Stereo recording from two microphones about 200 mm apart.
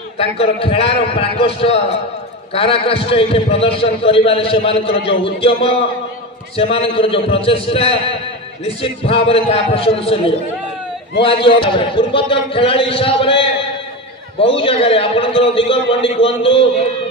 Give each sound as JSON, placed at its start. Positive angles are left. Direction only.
{"t": 0.2, "sound": "a man's voice", "side_deg": 30}